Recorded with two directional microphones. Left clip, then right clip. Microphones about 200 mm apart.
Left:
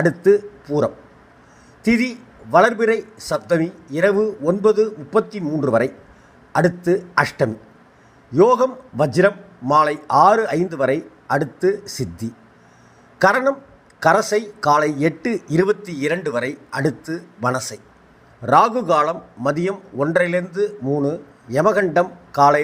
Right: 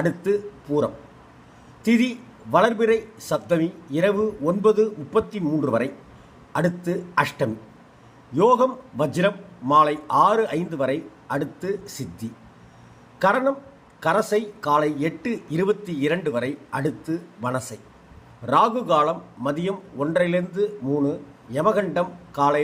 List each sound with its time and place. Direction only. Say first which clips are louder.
0.0 s a man's voice: left 8 dB; 30° left (ahead or behind)
13.1 s a man's voice: left 4 dB; 35° left (ahead or behind)